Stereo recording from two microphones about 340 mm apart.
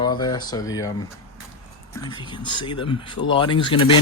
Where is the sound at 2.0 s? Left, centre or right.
Centre.